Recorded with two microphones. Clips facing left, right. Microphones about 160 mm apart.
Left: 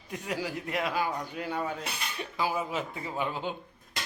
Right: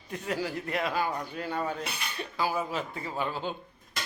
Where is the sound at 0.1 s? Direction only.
10° left (ahead or behind).